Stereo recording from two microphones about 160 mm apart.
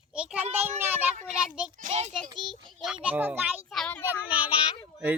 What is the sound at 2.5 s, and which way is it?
Child singing, 5° right (ahead or behind).